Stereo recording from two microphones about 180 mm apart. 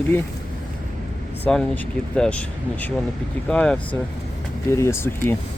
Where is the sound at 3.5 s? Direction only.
5° left (ahead or behind).